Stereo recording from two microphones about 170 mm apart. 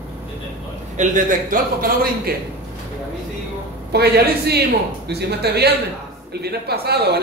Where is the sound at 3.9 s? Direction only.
70° right (ahead or behind).